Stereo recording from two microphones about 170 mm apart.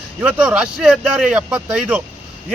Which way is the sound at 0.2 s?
5° right (ahead or behind).